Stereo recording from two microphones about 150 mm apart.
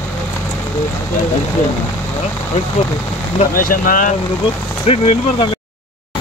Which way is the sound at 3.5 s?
70° left (ahead or behind).